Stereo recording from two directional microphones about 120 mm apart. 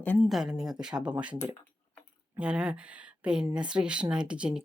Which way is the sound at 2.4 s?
10° right (ahead or behind).